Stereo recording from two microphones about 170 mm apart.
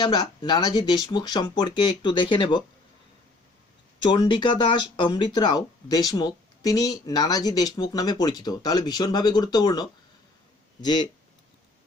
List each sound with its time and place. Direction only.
0.0 s speech: 25° left (ahead or behind)
4.0 s speech: 25° left (ahead or behind)